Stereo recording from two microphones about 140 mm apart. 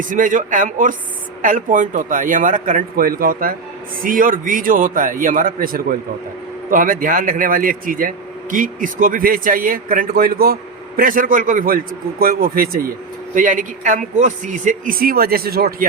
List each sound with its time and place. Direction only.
0.0 s a man's voice: 70° right (ahead or behind); by 6.0 s 90° right
6.7 s speech: 80° right
13.3 s a man's voice: 65° right (ahead or behind); by 15.9 s 90° right